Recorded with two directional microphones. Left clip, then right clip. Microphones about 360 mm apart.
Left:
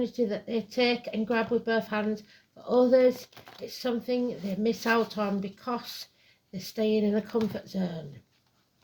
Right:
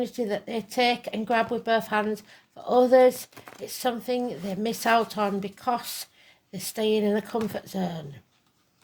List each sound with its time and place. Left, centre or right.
0.0 s speech: right